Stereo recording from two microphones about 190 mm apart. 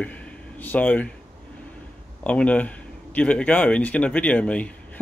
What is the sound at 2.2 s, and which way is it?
Speech, 5° left (ahead or behind).